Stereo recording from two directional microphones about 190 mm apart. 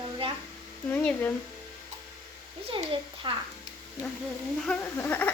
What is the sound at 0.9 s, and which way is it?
Speech, 10° left (ahead or behind).